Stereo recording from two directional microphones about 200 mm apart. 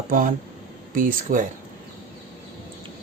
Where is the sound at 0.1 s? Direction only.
40° right (ahead or behind).